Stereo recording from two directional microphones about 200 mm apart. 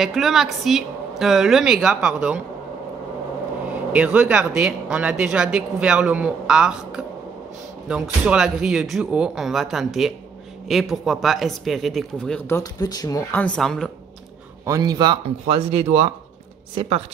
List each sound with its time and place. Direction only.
0.0 s speech: centre (ahead or behind)
3.9 s speech: 10° right (ahead or behind); by 13.2 s 20° left (ahead or behind)
13.3 s speech: 5° left (ahead or behind)
14.7 s speech: 20° right (ahead or behind)